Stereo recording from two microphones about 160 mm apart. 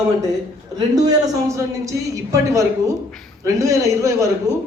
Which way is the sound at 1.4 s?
20° right (ahead or behind).